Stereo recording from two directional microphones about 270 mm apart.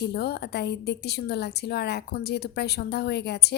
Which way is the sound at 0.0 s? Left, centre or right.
Left.